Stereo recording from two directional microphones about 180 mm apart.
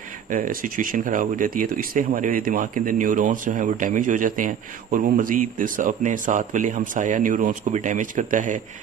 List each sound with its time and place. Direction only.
0.3 s speech: 50° right (ahead or behind)